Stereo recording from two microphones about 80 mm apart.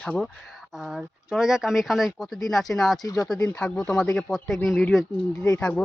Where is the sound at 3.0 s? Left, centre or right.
Left.